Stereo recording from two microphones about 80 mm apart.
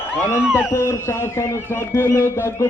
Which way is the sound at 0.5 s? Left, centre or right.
Left.